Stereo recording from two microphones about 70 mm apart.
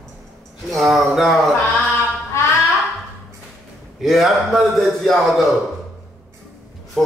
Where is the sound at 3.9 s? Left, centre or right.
Centre.